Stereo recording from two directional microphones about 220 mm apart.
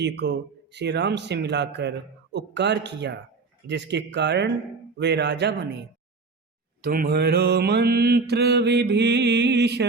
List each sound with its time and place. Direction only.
0.0 s a man's voice: 50° right (ahead or behind)
6.8 s a man's voice: 45° right (ahead or behind)